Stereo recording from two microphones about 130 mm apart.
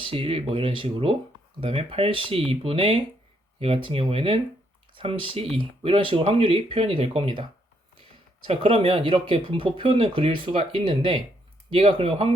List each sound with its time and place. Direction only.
0.0 s speech: 45° right (ahead or behind)
8.4 s speech: 45° right (ahead or behind)